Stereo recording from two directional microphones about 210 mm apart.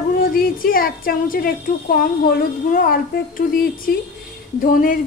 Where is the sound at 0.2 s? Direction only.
45° left (ahead or behind).